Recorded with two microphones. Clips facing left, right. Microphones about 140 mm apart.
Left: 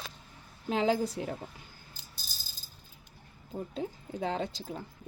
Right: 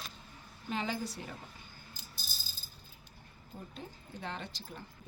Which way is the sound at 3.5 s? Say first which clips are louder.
Left 10 dB; 65° left (ahead or behind).